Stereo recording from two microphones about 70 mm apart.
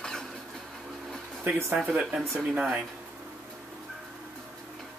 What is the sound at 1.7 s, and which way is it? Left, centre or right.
Speech, centre.